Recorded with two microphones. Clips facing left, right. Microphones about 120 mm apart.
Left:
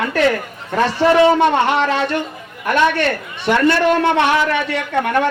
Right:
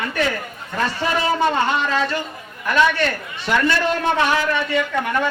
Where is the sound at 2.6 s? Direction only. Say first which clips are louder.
Left 3 dB; 60° left (ahead or behind).